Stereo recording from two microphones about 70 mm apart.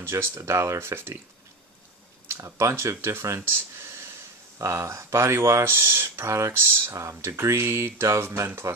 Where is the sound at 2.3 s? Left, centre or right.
Right.